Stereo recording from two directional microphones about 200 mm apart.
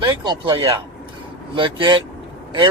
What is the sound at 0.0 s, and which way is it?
Speech, 25° right (ahead or behind).